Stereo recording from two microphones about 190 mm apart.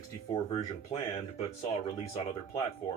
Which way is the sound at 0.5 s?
30° left (ahead or behind).